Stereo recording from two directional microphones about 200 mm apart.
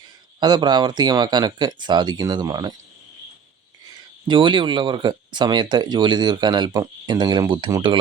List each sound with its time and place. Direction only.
0.3 s speech: 20° right (ahead or behind)
4.3 s speech: 25° right (ahead or behind)